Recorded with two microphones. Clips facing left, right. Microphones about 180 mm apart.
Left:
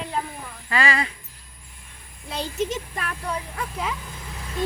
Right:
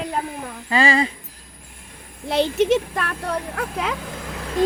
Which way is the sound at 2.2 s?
75° right (ahead or behind).